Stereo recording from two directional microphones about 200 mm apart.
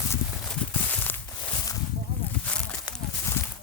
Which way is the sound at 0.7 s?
10° left (ahead or behind).